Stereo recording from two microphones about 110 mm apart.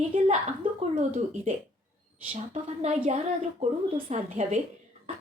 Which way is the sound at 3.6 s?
80° right.